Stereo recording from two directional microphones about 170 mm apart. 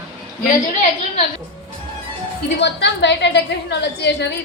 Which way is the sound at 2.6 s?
90° left.